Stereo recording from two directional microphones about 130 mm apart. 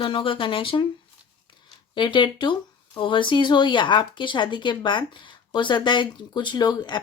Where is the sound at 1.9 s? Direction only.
35° left (ahead or behind).